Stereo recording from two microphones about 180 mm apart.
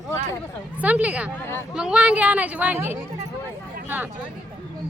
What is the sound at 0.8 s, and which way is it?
Speech, 10° right (ahead or behind).